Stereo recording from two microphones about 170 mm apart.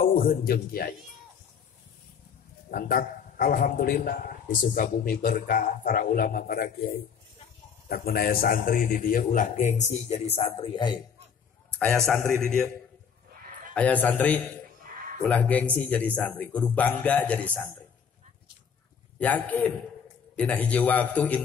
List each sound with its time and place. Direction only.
0.0 s a man's voice: 55° left (ahead or behind)
2.7 s a man's voice: 55° left (ahead or behind); by 11.0 s 30° left (ahead or behind)
12.1 s speech: 15° left (ahead or behind)
13.7 s speech: 10° left (ahead or behind)
19.1 s speech: 10° left (ahead or behind)